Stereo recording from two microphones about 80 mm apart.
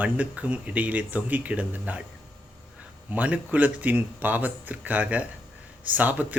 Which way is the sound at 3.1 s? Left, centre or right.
Centre.